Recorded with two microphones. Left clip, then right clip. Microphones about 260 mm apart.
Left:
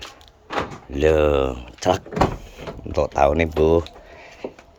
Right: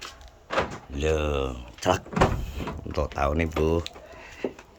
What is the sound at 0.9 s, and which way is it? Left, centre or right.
Speech, centre.